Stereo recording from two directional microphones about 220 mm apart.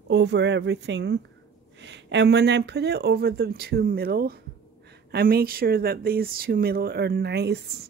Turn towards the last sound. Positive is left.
turn(degrees=-50)  # may be behind; listen again after turning